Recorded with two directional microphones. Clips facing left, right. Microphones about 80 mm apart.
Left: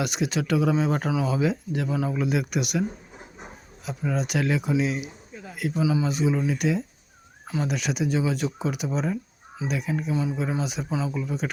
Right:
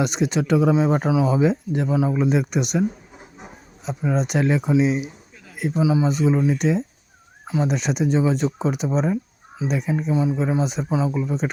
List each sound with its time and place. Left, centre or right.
0.0 s speech: right
3.8 s speech: right
7.4 s speech: right